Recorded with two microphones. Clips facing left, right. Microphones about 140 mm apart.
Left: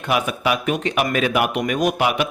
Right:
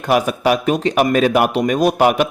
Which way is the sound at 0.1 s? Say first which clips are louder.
Right 5 dB; 40° right (ahead or behind).